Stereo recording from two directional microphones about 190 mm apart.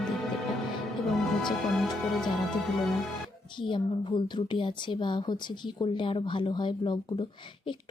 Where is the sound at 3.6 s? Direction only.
25° left (ahead or behind).